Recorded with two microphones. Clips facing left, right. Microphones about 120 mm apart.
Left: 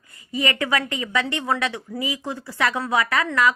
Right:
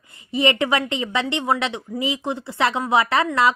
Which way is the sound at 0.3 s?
25° right (ahead or behind).